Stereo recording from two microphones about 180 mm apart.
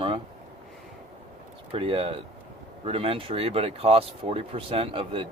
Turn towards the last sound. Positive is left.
turn(degrees=-30)  # may be behind; listen again after turning